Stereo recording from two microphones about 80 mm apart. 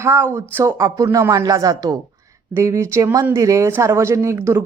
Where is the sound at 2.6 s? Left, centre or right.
Right.